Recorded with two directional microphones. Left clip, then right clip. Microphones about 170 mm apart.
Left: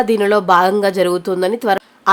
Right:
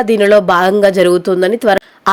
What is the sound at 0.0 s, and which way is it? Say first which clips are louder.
A woman's voice: right 5 dB; 20° right (ahead or behind).